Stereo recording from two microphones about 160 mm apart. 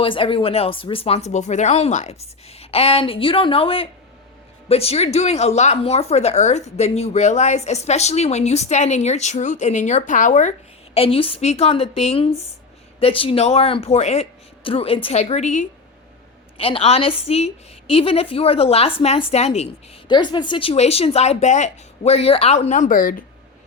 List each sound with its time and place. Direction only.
0.0 s speech: 35° left (ahead or behind); by 10.5 s 50° left (ahead or behind)
10.9 s speech: 35° left (ahead or behind)
16.6 s speech: 35° left (ahead or behind)
20.1 s speech: 30° left (ahead or behind); by 23.2 s 60° left (ahead or behind)